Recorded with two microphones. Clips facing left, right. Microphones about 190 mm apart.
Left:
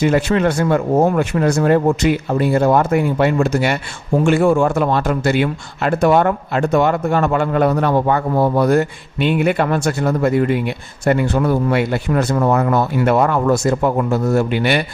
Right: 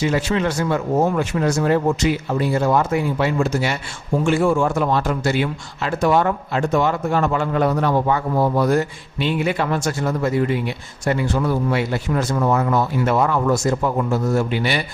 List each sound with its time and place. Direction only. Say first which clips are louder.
0.0 s speech: left 5 dB; 55° left (ahead or behind)